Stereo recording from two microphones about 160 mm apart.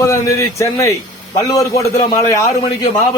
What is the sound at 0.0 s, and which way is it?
A man's voice, 20° left (ahead or behind).